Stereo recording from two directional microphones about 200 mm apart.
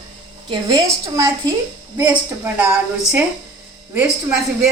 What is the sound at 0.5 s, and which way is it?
Speech, 20° right (ahead or behind).